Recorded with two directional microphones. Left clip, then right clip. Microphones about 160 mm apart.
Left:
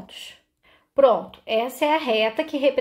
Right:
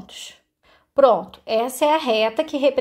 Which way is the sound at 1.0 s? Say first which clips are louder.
Right 2 dB; 45° right (ahead or behind).